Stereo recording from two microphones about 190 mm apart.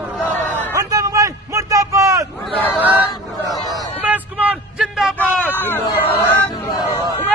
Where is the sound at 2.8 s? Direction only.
10° right (ahead or behind).